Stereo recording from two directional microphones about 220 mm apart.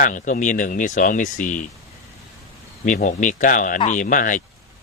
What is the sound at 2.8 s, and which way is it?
Speech, 35° left (ahead or behind).